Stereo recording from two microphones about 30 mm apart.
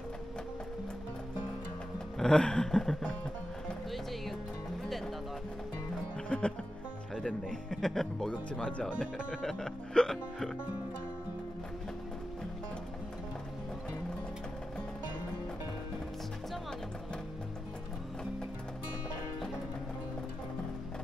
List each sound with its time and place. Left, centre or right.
2.2 s a sound: left
2.6 s speech: centre
6.2 s music: left
7.2 s speech: centre
8.6 s speech: left
9.4 s speech: centre
9.9 s a sound: left